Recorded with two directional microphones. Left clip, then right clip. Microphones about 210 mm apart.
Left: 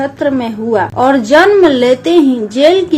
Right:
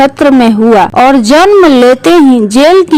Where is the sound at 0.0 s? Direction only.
50° right (ahead or behind).